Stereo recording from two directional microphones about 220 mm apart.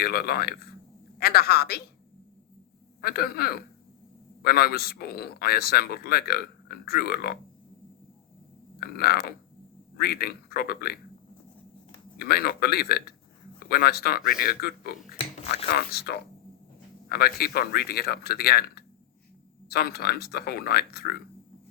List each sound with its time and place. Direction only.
0.0 s speech: 45° left (ahead or behind)
3.0 s speech: 45° left (ahead or behind)
8.8 s speech: 45° left (ahead or behind)
12.2 s speech: 45° left (ahead or behind)
15.1 s a sound: 25° left (ahead or behind)
15.7 s speech: 45° left (ahead or behind)